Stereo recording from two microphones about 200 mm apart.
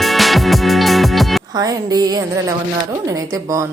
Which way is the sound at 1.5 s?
20° right (ahead or behind).